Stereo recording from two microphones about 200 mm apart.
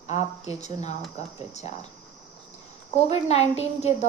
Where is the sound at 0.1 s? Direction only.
35° left (ahead or behind).